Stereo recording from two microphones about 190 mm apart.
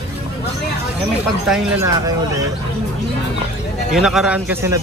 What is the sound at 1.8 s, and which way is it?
Speech, 20° right (ahead or behind).